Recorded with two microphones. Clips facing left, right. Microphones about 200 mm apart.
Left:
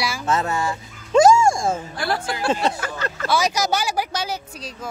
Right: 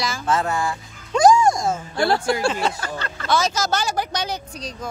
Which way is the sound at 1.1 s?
25° left (ahead or behind).